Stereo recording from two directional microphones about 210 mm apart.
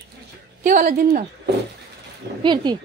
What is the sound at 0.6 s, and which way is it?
Speech, 40° right (ahead or behind).